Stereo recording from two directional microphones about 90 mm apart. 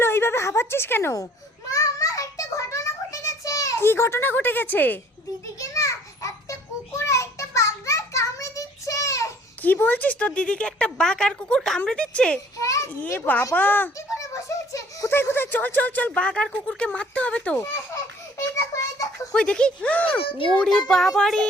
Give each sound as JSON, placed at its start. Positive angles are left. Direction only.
{"t": 0.0, "sound": "a woman's voice", "side_deg": 25}
{"t": 1.7, "sound": "child singing", "side_deg": 40}
{"t": 3.8, "sound": "speech", "side_deg": 25}
{"t": 5.5, "sound": "a sound", "side_deg": 35}
{"t": 9.6, "sound": "speech", "side_deg": 20}
{"t": 12.5, "sound": "a sound", "side_deg": 35}
{"t": 13.1, "sound": "speech", "side_deg": 20}
{"t": 14.2, "sound": "a sound", "side_deg": 35}
{"t": 15.1, "sound": "speech", "side_deg": 25}
{"t": 18.7, "sound": "a sound", "side_deg": 35}
{"t": 19.3, "sound": "speech", "side_deg": 10}
{"t": 20.2, "sound": "speech", "side_deg": 75}
{"t": 20.6, "sound": "speech", "side_deg": 10}